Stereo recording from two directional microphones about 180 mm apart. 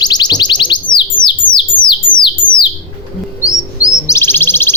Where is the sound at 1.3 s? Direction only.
25° left (ahead or behind).